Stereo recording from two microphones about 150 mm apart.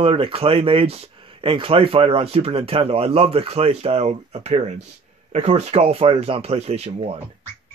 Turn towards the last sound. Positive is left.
turn(degrees=-45)  # may be behind; listen again after turning